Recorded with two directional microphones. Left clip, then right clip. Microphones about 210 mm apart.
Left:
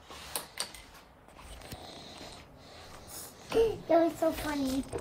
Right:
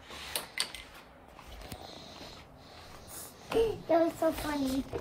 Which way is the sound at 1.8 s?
15° right (ahead or behind).